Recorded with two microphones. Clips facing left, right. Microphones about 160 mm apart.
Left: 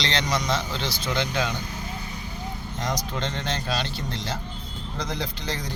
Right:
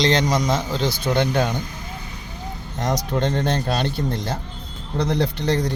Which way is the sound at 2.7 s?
60° right (ahead or behind).